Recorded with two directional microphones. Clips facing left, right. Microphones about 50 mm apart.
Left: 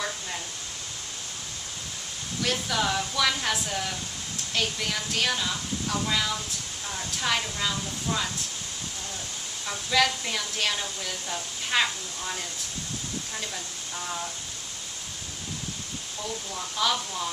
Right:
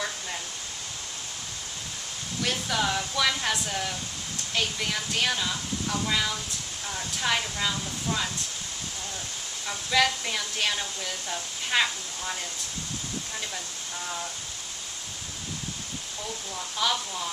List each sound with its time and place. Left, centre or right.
2.4 s a woman's voice: centre
9.6 s a woman's voice: centre
16.7 s a woman's voice: centre